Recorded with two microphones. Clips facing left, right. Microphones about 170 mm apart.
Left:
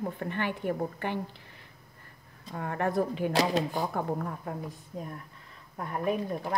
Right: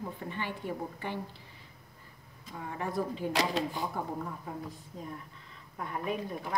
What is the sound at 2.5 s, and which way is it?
Speech, 60° left (ahead or behind).